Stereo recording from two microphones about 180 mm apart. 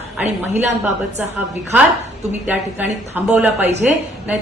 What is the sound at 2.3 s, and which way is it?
A woman's voice, 10° right (ahead or behind).